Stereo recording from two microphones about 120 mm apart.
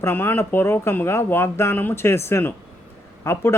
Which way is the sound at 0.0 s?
15° left (ahead or behind).